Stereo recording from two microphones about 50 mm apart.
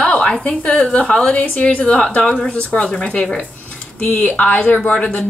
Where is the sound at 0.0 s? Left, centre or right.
Left.